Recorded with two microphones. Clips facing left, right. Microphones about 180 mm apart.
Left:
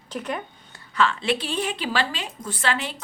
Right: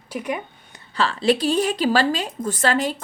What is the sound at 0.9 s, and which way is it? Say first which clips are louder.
A woman's voice: right 3 dB; 35° right (ahead or behind).